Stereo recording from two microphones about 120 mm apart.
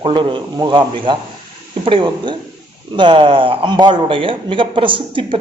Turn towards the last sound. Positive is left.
turn(degrees=-45)  # may be behind; listen again after turning